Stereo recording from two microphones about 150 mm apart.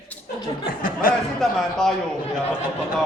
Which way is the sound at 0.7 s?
70° left (ahead or behind).